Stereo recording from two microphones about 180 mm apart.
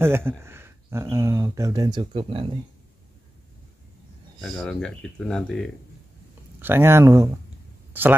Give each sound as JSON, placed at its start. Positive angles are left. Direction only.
{"t": 0.0, "sound": "speech", "side_deg": -15}
{"t": 4.4, "sound": "speech", "side_deg": 0}
{"t": 6.6, "sound": "speech", "side_deg": -10}